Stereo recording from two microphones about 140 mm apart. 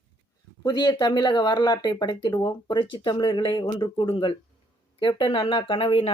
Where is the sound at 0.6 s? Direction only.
30° left (ahead or behind).